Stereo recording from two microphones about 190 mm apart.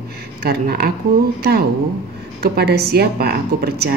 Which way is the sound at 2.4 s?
60° right (ahead or behind).